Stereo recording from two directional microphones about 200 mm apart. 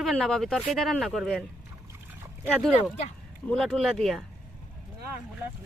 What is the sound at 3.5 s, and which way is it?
Speech, 5° left (ahead or behind).